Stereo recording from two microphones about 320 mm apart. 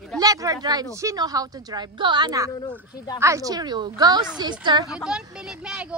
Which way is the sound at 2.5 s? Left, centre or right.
Centre.